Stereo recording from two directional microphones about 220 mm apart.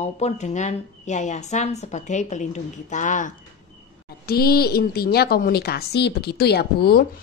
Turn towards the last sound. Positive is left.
turn(degrees=45)  # may be behind; listen again after turning